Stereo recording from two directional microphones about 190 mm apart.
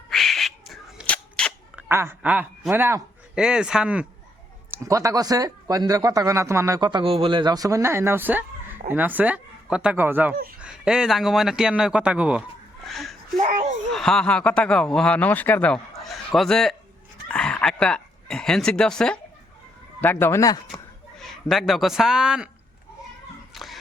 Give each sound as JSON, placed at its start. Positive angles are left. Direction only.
{"t": 0.1, "sound": "a sound", "side_deg": 0}
{"t": 1.7, "sound": "a man's voice", "side_deg": -10}
{"t": 4.7, "sound": "a man's voice", "side_deg": -15}
{"t": 13.4, "sound": "speech", "side_deg": -40}
{"t": 13.9, "sound": "speech", "side_deg": 5}
{"t": 21.2, "sound": "speech", "side_deg": 0}
{"t": 23.5, "sound": "a sound", "side_deg": 0}